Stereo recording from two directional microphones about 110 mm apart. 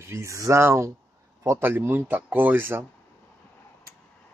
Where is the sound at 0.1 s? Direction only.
25° right (ahead or behind).